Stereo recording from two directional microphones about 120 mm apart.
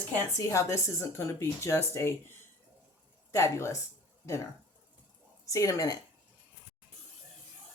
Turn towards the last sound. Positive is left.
turn(degrees=30)  # may be behind; listen again after turning